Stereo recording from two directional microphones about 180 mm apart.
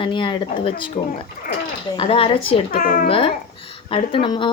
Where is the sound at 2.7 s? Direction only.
50° left (ahead or behind).